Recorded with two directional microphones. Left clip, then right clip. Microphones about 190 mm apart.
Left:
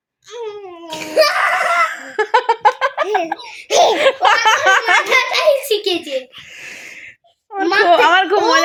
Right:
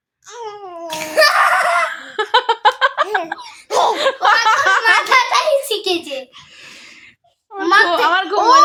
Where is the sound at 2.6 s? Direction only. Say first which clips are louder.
Even; 5° right (ahead or behind).